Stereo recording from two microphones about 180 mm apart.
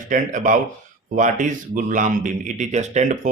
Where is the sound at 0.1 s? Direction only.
45° right (ahead or behind).